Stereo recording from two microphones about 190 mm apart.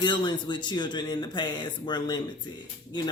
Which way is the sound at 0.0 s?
25° left (ahead or behind).